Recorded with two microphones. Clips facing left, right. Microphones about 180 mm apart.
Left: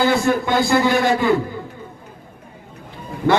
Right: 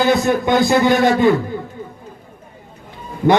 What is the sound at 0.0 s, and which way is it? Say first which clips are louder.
A man's voice: right 2 dB; 20° right (ahead or behind).